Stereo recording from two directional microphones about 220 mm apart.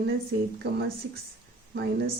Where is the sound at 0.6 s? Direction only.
50° right (ahead or behind).